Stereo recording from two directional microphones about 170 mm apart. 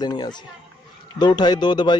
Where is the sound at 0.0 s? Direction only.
25° left (ahead or behind).